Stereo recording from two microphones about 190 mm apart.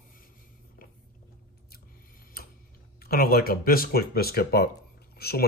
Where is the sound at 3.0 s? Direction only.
50° left (ahead or behind).